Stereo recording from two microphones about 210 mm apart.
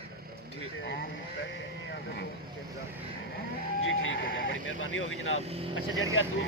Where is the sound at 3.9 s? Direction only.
65° left (ahead or behind).